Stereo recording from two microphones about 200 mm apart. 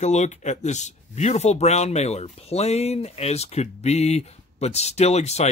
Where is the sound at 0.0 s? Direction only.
35° left (ahead or behind).